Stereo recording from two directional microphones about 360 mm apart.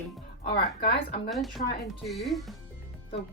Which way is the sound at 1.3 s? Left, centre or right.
Centre.